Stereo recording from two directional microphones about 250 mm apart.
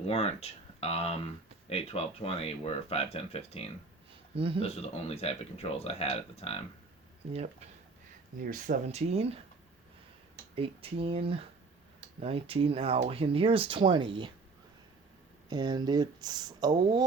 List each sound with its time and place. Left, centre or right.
0.1 s speech: left
4.4 s speech: right
4.6 s speech: left
8.4 s speech: right
10.5 s speech: right
15.4 s speech: centre